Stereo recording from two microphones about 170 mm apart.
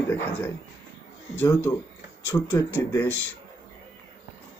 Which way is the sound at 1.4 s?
15° left (ahead or behind).